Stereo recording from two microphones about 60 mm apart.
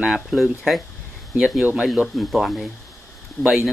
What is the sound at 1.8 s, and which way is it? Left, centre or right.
Speech, centre.